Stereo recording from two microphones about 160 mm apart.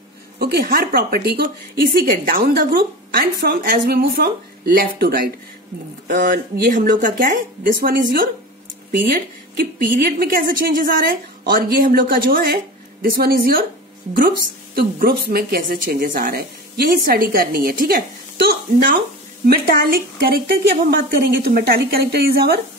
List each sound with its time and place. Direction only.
0.4 s a woman's voice: 80° right
14.8 s a woman's voice: 70° right (ahead or behind)